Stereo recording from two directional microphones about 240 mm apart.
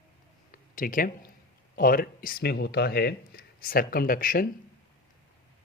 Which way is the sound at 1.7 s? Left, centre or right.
Left.